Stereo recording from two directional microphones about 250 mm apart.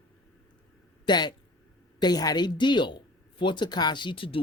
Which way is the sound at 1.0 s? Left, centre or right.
Centre.